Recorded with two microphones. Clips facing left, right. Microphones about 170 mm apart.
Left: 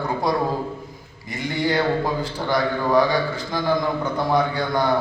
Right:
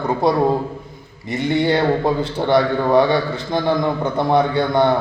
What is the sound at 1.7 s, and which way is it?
A man's voice, 25° right (ahead or behind).